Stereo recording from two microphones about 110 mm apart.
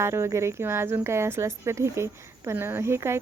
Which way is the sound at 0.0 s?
25° right (ahead or behind).